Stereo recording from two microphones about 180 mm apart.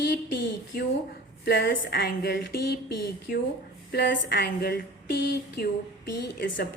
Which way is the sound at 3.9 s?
70° left (ahead or behind).